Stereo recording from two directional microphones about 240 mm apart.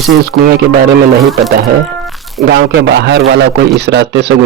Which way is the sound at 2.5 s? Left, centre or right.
Right.